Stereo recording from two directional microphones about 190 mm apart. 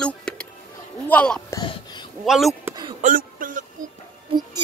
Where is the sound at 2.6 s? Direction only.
20° right (ahead or behind).